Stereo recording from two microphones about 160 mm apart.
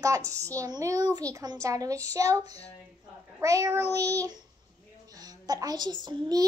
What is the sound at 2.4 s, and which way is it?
Child singing, 40° left (ahead or behind).